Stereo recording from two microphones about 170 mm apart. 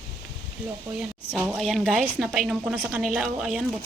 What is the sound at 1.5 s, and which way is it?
A woman's voice, centre (ahead or behind).